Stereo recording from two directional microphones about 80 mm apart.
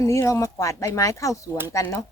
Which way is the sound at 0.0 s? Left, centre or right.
Left.